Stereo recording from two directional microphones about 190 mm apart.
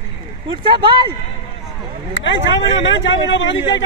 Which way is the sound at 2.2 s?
70° left (ahead or behind).